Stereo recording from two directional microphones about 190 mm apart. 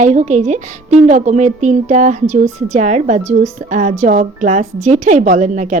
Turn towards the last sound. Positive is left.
turn(degrees=-40)  # may be behind; listen again after turning